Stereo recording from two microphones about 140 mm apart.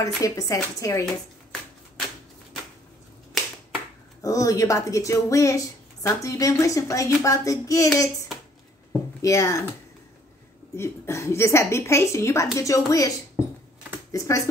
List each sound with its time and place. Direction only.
0.0 s a woman's voice: 25° left (ahead or behind)
4.2 s a woman's voice: 25° left (ahead or behind)
9.2 s a woman's voice: 25° left (ahead or behind)
10.8 s a woman's voice: 20° left (ahead or behind)
14.1 s a woman's voice: 25° left (ahead or behind)